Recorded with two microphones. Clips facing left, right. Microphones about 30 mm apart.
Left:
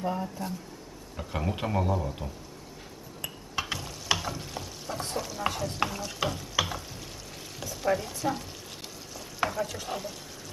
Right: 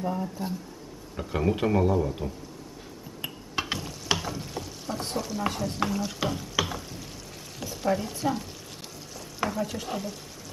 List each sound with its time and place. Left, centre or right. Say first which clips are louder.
0.0 s speech: right 1 dB; centre
1.1 s a man's voice: right 6 dB; centre
3.2 s a sound: right 2 dB; right
3.7 s stir: even; centre
5.0 s a man's voice: right 1 dB; centre
5.8 s stir: right 2 dB; centre
7.6 s speech: right 1 dB; centre
9.4 s stir: even; centre
9.8 s a man's voice: right 2 dB; centre